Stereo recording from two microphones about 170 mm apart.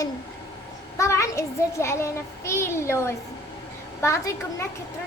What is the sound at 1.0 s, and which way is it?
A child's voice, 15° left (ahead or behind).